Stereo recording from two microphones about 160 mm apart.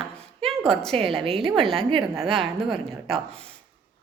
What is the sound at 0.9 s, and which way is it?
Speech, 35° right (ahead or behind).